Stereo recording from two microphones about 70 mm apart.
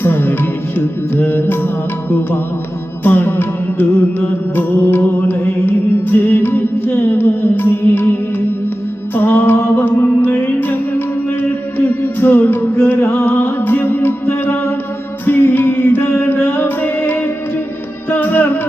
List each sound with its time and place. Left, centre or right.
0.0 s music: left